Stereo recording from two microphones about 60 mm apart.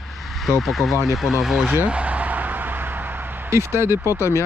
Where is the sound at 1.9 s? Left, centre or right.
Right.